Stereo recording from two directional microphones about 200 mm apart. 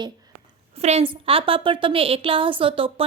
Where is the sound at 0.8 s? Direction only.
30° right (ahead or behind).